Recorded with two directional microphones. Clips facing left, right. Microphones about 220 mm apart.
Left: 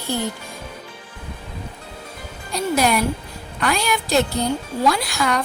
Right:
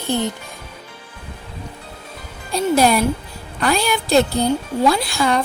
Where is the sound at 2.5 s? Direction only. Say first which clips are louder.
Right 4 dB; 30° right (ahead or behind).